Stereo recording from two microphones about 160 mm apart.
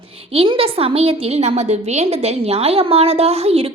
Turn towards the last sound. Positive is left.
turn(degrees=-40)  # may be behind; listen again after turning